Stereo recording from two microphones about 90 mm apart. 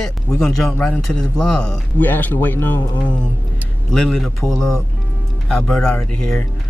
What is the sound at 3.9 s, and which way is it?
Speech, 5° left (ahead or behind).